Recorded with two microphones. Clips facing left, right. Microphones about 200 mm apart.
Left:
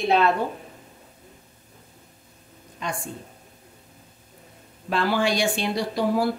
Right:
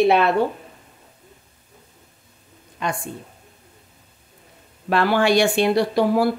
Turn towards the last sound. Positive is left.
turn(degrees=-65)  # may be behind; listen again after turning